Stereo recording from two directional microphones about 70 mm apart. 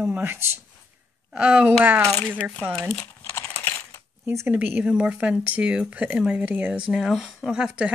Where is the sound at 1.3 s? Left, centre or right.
Centre.